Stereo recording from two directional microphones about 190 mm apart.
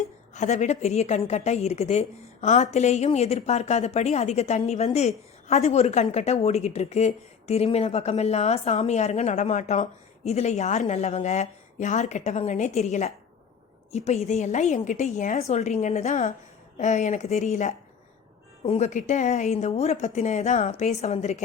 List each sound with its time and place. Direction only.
0.3 s a woman's voice: 40° left (ahead or behind)